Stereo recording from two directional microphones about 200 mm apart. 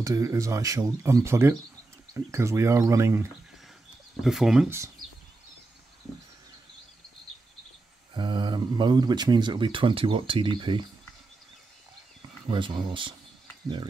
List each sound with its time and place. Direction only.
0.0 s speech: 15° right (ahead or behind)
4.2 s speech: centre (ahead or behind)
8.1 s speech: 25° right (ahead or behind)
12.2 s speech: 25° right (ahead or behind)